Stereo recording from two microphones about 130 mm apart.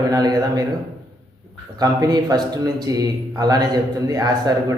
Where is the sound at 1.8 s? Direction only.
30° right (ahead or behind).